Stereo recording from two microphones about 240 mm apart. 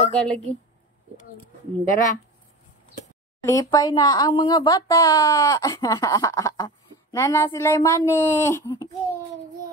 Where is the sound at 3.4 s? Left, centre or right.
Centre.